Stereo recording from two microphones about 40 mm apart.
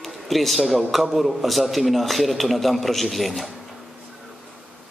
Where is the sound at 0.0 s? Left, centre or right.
Centre.